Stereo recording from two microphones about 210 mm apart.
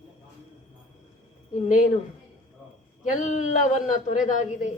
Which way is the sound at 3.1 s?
35° left (ahead or behind).